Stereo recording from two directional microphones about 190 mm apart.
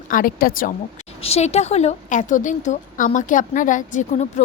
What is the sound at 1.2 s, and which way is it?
A woman's voice, 35° left (ahead or behind).